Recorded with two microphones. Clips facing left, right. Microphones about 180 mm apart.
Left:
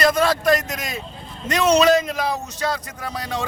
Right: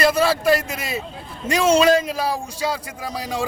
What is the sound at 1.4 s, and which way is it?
Speech, 30° right (ahead or behind).